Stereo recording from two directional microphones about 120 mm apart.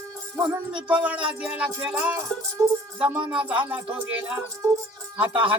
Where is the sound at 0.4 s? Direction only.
10° right (ahead or behind).